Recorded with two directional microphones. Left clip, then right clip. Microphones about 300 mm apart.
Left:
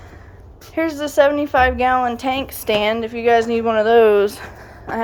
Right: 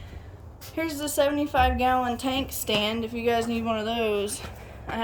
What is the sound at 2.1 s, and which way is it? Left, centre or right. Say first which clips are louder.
A woman's voice: left 7 dB; centre.